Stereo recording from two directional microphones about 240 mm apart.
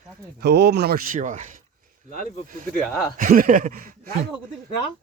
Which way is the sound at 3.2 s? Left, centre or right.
Right.